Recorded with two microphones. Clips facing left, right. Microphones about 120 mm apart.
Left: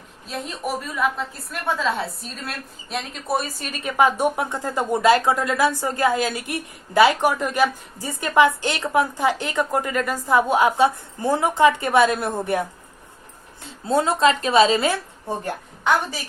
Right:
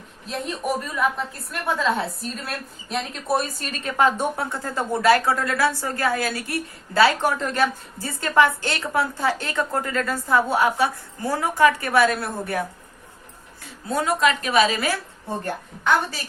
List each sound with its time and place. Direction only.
0.3 s a woman's voice: centre (ahead or behind); by 12.6 s 20° left (ahead or behind)
13.7 s a woman's voice: 30° left (ahead or behind)